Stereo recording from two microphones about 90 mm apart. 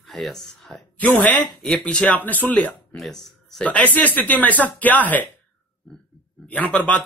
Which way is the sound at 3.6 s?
15° left (ahead or behind).